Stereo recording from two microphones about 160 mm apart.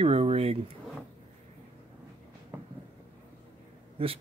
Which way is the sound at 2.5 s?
15° right (ahead or behind).